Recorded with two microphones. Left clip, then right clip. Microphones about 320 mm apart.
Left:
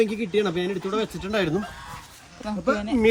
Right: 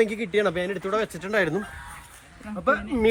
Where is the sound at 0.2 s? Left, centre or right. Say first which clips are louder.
Even; centre.